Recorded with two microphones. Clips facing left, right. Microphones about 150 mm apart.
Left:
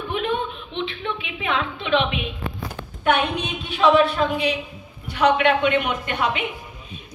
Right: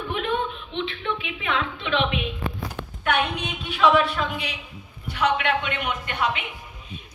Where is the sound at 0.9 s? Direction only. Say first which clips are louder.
Even; 25° left (ahead or behind).